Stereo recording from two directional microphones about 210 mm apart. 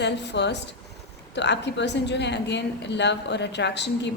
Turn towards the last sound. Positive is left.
turn(degrees=55)  # may be behind; listen again after turning